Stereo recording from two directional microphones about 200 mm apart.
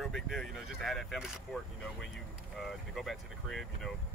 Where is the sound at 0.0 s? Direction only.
Centre (ahead or behind).